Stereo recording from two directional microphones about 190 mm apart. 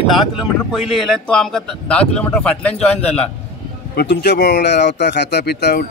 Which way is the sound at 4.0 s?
60° left (ahead or behind).